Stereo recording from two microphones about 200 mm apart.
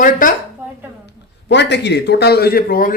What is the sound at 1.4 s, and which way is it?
Speech, 60° left (ahead or behind).